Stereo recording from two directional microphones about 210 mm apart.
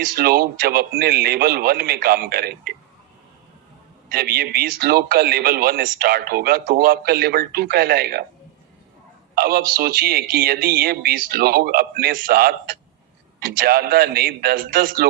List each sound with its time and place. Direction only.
0.0 s a man's voice: 45° right (ahead or behind)
4.1 s a man's voice: 45° right (ahead or behind)
9.3 s a man's voice: 45° right (ahead or behind)